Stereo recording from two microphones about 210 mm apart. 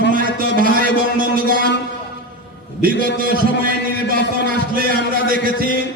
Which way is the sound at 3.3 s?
45° right (ahead or behind).